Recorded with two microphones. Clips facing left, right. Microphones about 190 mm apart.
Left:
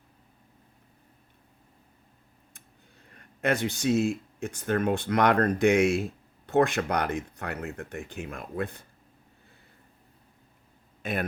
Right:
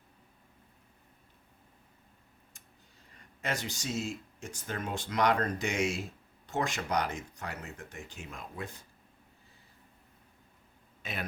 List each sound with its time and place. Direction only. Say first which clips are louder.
3.1 s speech: left 9 dB; 60° left (ahead or behind)
11.0 s speech: left 9 dB; 55° left (ahead or behind)